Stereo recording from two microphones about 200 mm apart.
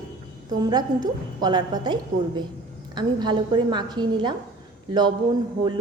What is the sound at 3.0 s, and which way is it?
A woman's voice, 20° right (ahead or behind).